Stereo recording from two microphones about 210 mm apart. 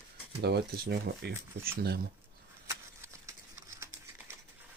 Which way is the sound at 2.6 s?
15° right (ahead or behind).